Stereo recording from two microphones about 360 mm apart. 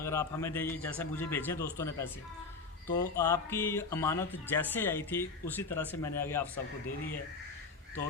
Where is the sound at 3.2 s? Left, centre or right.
Centre.